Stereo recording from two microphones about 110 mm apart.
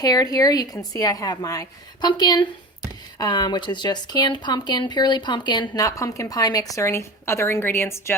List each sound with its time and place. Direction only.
0.0 s speech: 35° left (ahead or behind)